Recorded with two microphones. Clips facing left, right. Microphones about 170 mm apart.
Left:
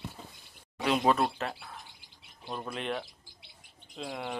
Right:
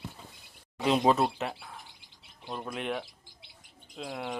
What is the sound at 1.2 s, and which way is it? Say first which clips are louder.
Speech: right 1 dB; 10° right (ahead or behind).